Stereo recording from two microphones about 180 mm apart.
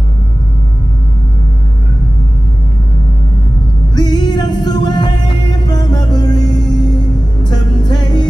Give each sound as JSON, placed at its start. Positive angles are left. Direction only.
{"t": 3.9, "sound": "music", "side_deg": 25}